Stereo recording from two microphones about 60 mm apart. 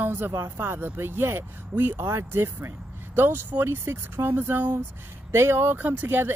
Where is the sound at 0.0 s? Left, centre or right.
Right.